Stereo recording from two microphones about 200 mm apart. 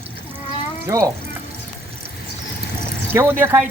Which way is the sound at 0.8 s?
15° right (ahead or behind).